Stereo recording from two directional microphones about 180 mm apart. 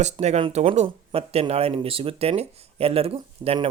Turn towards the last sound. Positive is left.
turn(degrees=-30)  # may be behind; listen again after turning